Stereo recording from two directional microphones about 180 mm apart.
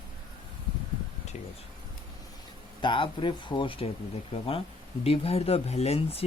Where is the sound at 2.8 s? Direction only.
25° left (ahead or behind).